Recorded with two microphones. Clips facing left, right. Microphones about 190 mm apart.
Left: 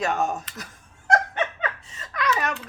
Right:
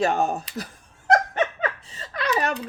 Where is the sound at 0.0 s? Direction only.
30° right (ahead or behind).